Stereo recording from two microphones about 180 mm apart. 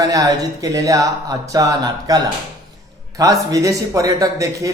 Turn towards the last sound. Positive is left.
turn(degrees=-20)  # may be behind; listen again after turning